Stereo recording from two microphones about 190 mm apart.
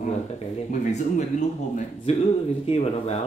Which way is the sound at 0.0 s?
40° left (ahead or behind).